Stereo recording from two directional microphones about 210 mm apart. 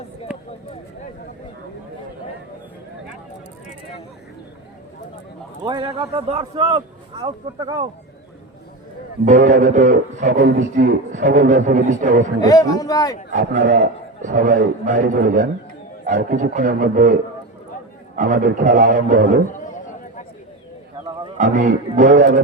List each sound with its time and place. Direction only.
5.6 s speech: 25° right (ahead or behind)
9.2 s a man's voice: 35° right (ahead or behind)
12.4 s speech: 15° left (ahead or behind)
13.6 s a man's voice: 60° right (ahead or behind)
14.2 s a man's voice: 35° right (ahead or behind)
18.2 s a man's voice: 40° right (ahead or behind)
21.3 s a man's voice: 35° right (ahead or behind)